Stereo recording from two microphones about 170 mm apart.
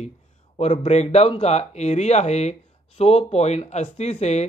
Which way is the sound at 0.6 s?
40° left (ahead or behind).